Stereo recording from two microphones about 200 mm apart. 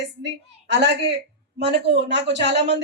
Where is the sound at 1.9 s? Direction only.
55° right (ahead or behind).